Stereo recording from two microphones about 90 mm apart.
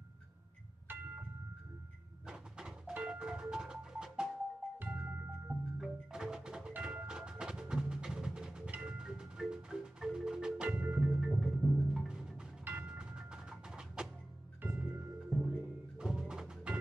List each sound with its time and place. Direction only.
2.2 s music: 10° right (ahead or behind)
5.8 s percussion: 5° right (ahead or behind)
10.7 s music: 15° right (ahead or behind)
11.1 s music: 5° right (ahead or behind)
12.6 s tubular bells: 10° right (ahead or behind)
14.6 s music: 20° right (ahead or behind)
15.2 s music: centre (ahead or behind)